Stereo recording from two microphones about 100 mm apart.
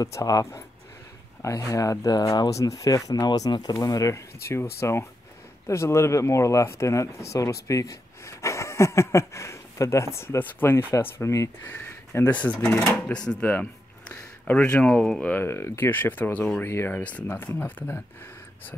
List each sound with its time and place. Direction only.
0.0 s speech: 35° left (ahead or behind); by 15.3 s 5° left (ahead or behind)
15.3 s speech: 25° left (ahead or behind)